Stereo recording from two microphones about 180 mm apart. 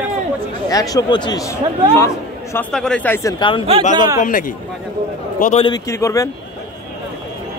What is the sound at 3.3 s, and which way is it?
Speech, 30° left (ahead or behind).